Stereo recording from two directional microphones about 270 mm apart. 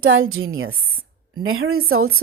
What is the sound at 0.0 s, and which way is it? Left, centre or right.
Speech, right.